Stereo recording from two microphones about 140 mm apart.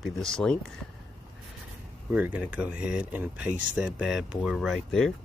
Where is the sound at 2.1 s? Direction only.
10° right (ahead or behind).